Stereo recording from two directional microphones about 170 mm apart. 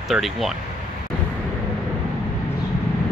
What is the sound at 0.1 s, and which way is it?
Speech, centre (ahead or behind).